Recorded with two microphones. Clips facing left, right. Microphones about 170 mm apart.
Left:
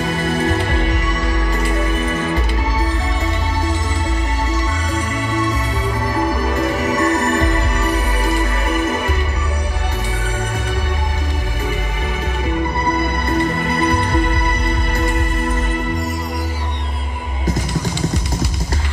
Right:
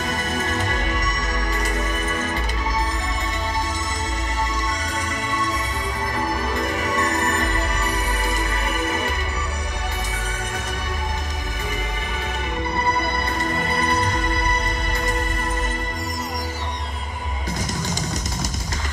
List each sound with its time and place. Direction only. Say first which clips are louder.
0.6 s music: left 5 dB; 45° right (ahead or behind)
7.0 s music: left 7 dB; 40° left (ahead or behind)